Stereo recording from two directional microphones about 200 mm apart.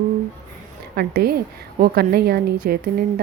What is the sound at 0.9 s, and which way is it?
Speech, 50° right (ahead or behind).